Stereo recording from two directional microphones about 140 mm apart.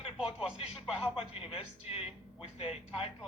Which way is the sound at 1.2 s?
45° left (ahead or behind).